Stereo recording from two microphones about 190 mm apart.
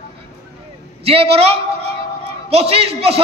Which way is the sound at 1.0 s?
30° right (ahead or behind).